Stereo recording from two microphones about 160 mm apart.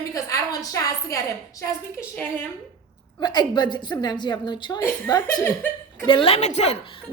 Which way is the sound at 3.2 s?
25° left (ahead or behind).